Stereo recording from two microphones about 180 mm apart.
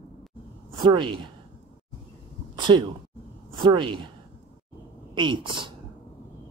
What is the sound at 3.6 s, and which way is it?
Speech, 25° right (ahead or behind).